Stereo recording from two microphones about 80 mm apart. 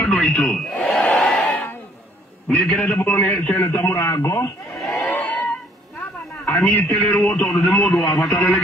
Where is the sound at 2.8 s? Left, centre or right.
Left.